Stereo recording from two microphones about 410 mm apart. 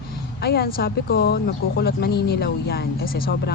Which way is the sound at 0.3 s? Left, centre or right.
Left.